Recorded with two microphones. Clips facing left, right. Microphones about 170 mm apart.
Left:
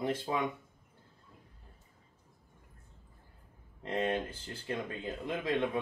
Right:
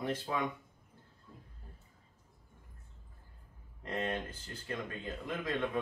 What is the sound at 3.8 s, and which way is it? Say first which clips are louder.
A man's voice: left 4 dB; 20° left (ahead or behind).